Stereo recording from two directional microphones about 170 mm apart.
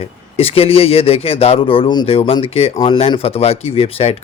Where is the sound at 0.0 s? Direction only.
35° left (ahead or behind).